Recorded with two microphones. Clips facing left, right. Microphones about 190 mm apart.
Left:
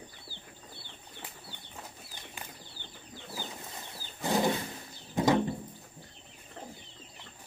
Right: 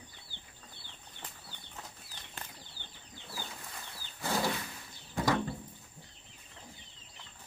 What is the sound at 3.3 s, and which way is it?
Bird flight, 20° left (ahead or behind).